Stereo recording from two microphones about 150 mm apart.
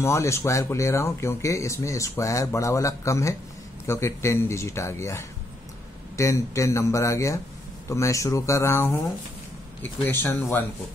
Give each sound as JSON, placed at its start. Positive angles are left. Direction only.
{"t": 0.0, "sound": "speech", "side_deg": 20}
{"t": 10.0, "sound": "speech", "side_deg": 15}